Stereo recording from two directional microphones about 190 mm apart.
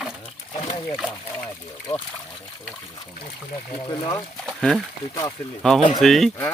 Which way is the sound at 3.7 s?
25° left (ahead or behind).